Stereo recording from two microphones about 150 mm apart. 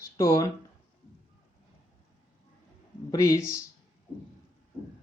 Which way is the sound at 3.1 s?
25° left (ahead or behind).